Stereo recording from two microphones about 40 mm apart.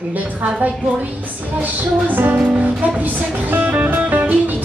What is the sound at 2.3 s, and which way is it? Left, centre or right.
Music, right.